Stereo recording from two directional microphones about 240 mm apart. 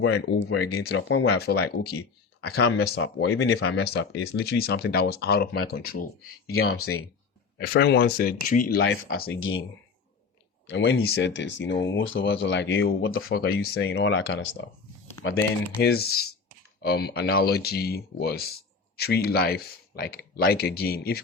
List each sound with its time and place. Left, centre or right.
0.0 s speech: left
0.9 s speech: left
1.5 s speech: left
2.5 s speech: left
3.0 s speech: left
3.3 s speech: left
7.6 s speech: left
8.8 s speech: left
10.7 s speech: left
13.2 s speech: left